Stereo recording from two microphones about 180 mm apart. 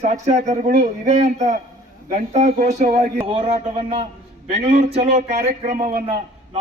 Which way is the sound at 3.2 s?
30° right (ahead or behind).